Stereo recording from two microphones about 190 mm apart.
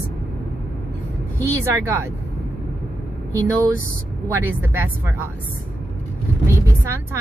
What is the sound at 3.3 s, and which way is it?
Speech, 15° right (ahead or behind).